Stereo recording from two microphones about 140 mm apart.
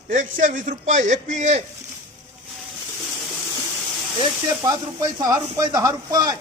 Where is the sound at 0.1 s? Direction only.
65° right (ahead or behind).